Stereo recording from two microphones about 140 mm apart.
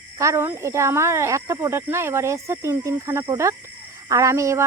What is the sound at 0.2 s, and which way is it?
Speech, 20° right (ahead or behind).